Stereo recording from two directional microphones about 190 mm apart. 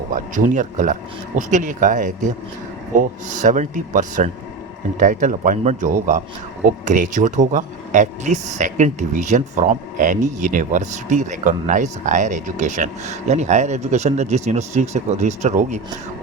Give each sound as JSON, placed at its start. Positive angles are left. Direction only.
{"t": 0.1, "sound": "speech", "side_deg": -45}